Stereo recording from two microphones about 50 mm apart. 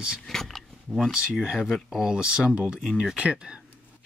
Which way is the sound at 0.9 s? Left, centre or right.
Centre.